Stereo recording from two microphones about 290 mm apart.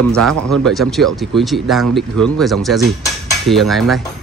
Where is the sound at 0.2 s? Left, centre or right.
Right.